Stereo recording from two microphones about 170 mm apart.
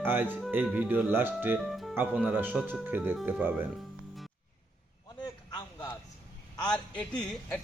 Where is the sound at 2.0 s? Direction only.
10° right (ahead or behind).